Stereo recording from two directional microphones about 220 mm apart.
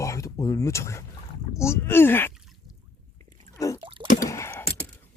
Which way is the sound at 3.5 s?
15° left (ahead or behind).